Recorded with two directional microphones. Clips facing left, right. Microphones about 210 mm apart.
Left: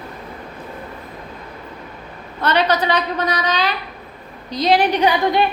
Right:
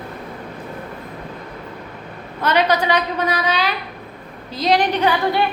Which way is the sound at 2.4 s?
10° right (ahead or behind).